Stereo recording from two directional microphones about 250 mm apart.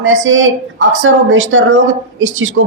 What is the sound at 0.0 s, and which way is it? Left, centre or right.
A woman's voice, right.